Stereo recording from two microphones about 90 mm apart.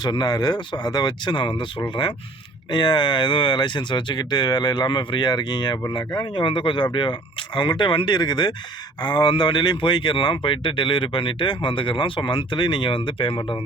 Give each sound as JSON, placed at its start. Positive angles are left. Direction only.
{"t": 0.0, "sound": "speech", "side_deg": 50}
{"t": 2.7, "sound": "speech", "side_deg": 60}